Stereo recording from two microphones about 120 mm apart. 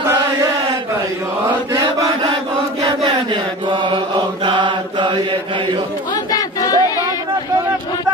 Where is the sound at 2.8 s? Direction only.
40° right (ahead or behind).